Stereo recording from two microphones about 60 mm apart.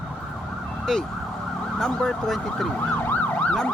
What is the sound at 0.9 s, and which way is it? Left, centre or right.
Speech, centre.